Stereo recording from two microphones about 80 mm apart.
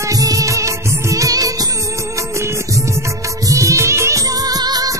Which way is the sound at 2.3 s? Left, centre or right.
Right.